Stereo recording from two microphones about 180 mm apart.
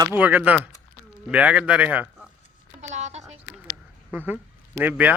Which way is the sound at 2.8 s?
40° right (ahead or behind).